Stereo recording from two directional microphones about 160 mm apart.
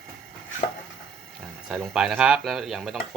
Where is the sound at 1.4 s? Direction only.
5° right (ahead or behind).